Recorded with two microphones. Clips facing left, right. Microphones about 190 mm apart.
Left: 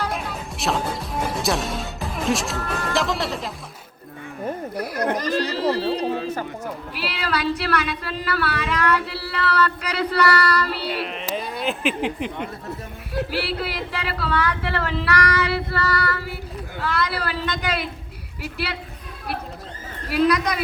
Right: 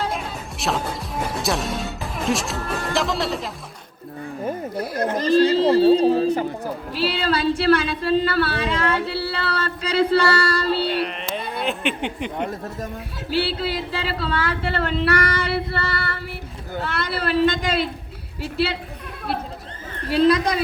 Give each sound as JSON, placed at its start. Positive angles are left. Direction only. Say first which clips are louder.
{"t": 0.6, "sound": "speech", "louder": "left 1 dB", "side_deg": 0}
{"t": 4.7, "sound": "a sound", "louder": "left 1 dB", "side_deg": -25}
{"t": 6.7, "sound": "speech", "louder": "right 6 dB", "side_deg": -30}
{"t": 10.8, "sound": "a sound", "louder": "right 3 dB", "side_deg": 0}
{"t": 13.3, "sound": "speech", "louder": "right 3 dB", "side_deg": -25}
{"t": 20.1, "sound": "speech", "louder": "right 3 dB", "side_deg": -30}